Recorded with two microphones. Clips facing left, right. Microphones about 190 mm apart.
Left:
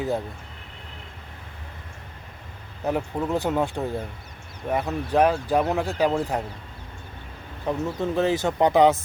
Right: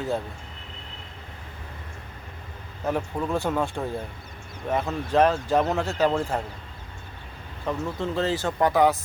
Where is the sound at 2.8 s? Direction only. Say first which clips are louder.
Left 1 dB; 20° left (ahead or behind).